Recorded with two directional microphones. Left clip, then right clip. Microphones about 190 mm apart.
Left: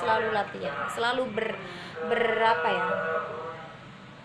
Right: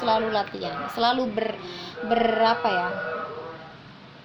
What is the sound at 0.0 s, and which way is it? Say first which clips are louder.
Speech: right 3 dB; 50° right (ahead or behind).